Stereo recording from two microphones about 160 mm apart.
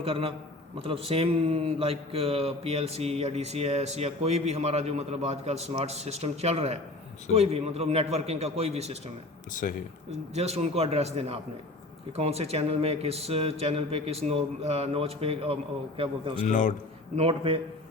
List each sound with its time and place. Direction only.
0.0 s speech: 35° right (ahead or behind)
9.5 s speech: 55° left (ahead or behind)
10.1 s speech: 40° right (ahead or behind)
16.4 s a man's voice: 50° left (ahead or behind)
17.2 s speech: 35° right (ahead or behind)